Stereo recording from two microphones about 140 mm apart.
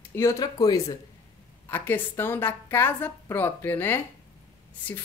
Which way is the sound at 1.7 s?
15° left (ahead or behind).